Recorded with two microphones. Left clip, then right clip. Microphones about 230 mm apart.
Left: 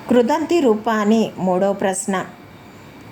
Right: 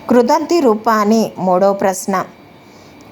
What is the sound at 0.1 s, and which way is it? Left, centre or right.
A woman's voice, centre.